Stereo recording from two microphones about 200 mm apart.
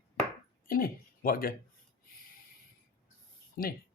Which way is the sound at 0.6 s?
45° left (ahead or behind).